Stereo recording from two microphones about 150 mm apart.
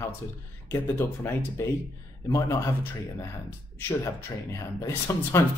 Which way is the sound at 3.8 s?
20° left (ahead or behind).